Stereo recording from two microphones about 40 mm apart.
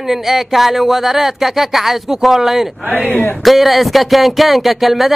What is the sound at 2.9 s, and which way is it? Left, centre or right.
Speech, left.